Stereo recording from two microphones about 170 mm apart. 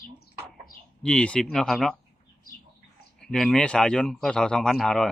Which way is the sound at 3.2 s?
5° left (ahead or behind).